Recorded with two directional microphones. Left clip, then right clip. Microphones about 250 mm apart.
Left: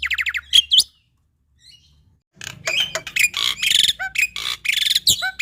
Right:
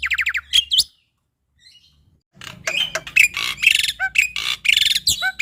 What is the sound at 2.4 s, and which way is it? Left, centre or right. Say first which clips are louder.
Creak: left 2 dB; left.